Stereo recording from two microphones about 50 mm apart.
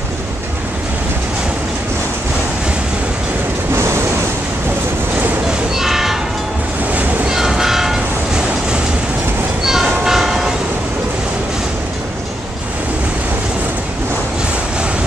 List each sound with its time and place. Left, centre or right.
5.8 s train: centre
6.9 s train: right
7.2 s train: centre
9.7 s train: centre